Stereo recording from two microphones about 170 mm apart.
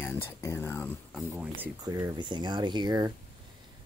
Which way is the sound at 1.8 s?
20° right (ahead or behind).